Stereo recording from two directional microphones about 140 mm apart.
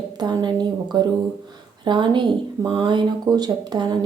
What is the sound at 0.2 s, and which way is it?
Speech, 30° right (ahead or behind).